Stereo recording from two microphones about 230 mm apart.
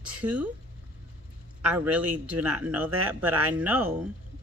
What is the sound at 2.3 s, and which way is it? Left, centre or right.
Speech, right.